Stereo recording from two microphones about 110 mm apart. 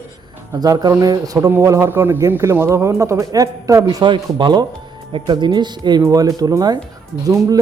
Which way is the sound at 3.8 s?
45° right (ahead or behind).